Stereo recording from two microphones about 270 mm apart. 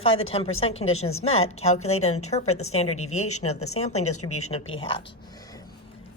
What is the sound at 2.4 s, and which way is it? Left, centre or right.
Speech, left.